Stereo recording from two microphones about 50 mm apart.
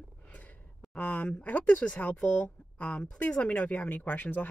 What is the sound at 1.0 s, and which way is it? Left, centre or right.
Speech, left.